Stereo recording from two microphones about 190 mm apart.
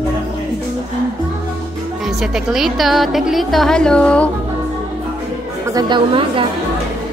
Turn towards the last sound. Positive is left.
turn(degrees=-25)  # may be behind; listen again after turning